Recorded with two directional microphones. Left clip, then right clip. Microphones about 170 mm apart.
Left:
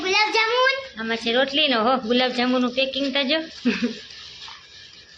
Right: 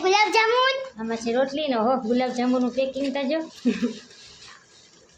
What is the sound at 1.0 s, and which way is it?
Speech, centre (ahead or behind).